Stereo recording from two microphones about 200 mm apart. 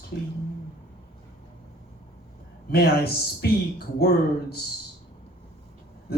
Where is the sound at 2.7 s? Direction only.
50° left (ahead or behind).